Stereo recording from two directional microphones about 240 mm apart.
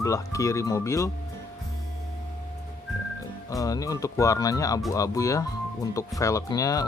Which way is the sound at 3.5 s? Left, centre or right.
Centre.